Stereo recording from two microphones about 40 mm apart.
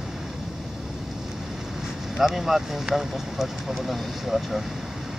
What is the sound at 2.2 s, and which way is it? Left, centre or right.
Speech, centre.